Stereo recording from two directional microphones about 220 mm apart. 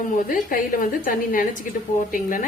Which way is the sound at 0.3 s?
35° left (ahead or behind).